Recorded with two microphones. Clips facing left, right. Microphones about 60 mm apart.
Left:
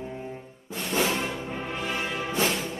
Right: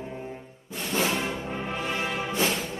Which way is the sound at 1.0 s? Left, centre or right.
Centre.